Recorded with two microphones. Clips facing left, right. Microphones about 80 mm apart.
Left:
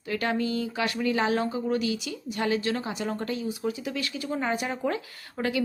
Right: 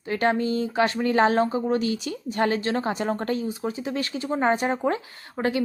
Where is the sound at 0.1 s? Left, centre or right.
Right.